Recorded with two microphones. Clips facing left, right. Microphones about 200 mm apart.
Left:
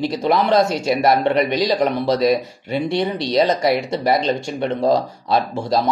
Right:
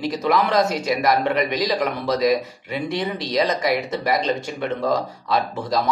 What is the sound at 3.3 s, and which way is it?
Speech, 30° left (ahead or behind).